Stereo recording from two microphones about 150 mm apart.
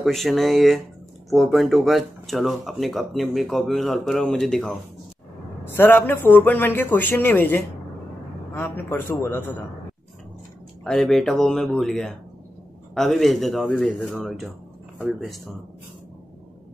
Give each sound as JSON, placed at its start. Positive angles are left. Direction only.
{"t": 0.0, "sound": "speech", "side_deg": 0}
{"t": 5.7, "sound": "a man's voice", "side_deg": 15}
{"t": 10.8, "sound": "speech", "side_deg": 5}